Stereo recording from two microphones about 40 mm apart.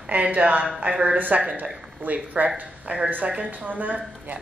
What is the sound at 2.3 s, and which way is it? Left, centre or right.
Speech, right.